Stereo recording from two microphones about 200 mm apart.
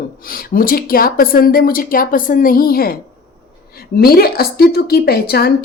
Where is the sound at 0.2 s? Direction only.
45° left (ahead or behind).